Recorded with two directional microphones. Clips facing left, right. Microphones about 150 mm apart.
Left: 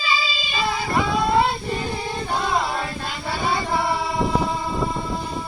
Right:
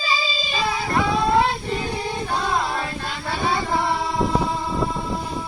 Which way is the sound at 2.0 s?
Centre (ahead or behind).